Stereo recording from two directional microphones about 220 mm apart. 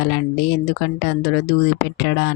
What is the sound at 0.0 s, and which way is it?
Speech, 50° left (ahead or behind).